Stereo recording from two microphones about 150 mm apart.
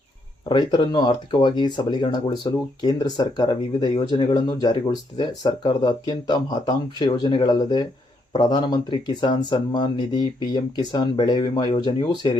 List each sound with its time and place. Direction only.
0.4 s speech: 30° left (ahead or behind)